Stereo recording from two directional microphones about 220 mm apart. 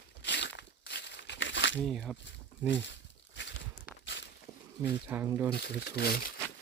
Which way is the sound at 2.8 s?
55° left (ahead or behind).